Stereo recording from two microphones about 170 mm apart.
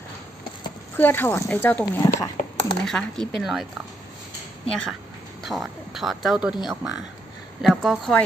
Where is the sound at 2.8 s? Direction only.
5° left (ahead or behind).